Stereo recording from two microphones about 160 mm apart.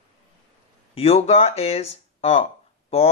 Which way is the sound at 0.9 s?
40° left (ahead or behind).